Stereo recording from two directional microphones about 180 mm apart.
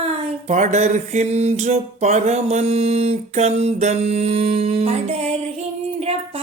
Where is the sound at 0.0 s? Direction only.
40° right (ahead or behind).